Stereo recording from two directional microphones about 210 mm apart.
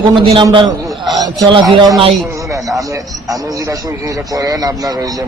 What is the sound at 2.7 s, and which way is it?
A man's voice, 15° right (ahead or behind).